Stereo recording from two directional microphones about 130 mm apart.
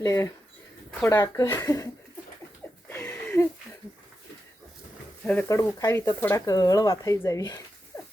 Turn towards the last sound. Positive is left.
turn(degrees=25)  # may be behind; listen again after turning